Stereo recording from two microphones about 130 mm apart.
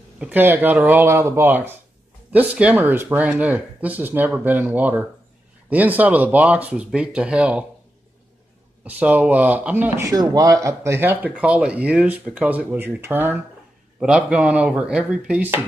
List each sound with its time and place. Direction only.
0.2 s speech: 15° right (ahead or behind)
8.8 s speech: 10° right (ahead or behind)